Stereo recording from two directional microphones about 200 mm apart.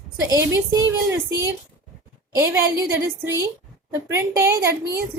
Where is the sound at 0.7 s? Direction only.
15° right (ahead or behind).